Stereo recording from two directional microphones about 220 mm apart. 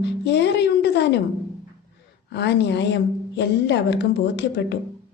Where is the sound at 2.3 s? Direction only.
50° left (ahead or behind).